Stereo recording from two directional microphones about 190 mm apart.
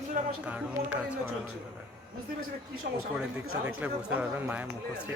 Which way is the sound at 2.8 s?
60° right (ahead or behind).